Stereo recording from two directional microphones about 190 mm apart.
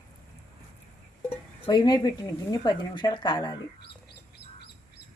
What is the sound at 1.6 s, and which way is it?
Speech, 25° left (ahead or behind).